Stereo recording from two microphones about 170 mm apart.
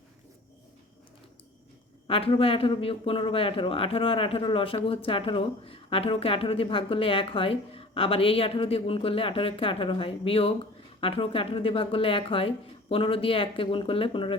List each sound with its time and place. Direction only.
2.0 s speech: 35° left (ahead or behind)